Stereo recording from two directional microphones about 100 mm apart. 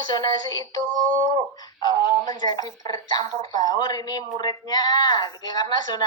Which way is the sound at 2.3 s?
45° left (ahead or behind).